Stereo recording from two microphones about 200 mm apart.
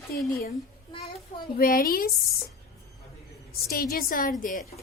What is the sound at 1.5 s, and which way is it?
Speech, 45° left (ahead or behind).